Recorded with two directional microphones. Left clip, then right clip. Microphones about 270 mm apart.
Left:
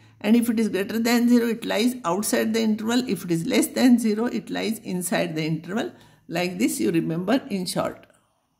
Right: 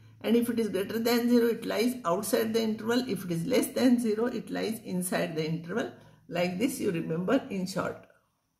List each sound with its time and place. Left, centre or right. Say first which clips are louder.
0.2 s speech: left 5 dB; left